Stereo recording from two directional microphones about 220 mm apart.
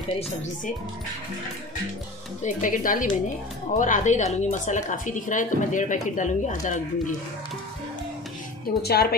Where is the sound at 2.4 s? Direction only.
35° left (ahead or behind).